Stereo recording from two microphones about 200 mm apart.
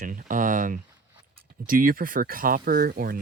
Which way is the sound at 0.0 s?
40° right (ahead or behind).